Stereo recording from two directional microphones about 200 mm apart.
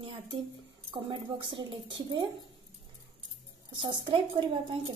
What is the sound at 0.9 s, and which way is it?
A woman's voice, 25° right (ahead or behind).